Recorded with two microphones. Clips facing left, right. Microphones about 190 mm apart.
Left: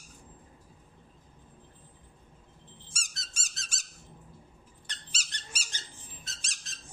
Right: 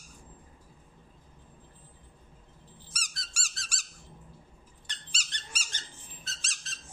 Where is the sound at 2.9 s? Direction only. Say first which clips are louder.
Right 2 dB; 25° left (ahead or behind).